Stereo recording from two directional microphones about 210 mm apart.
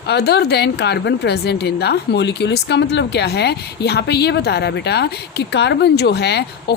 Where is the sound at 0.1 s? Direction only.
50° left (ahead or behind).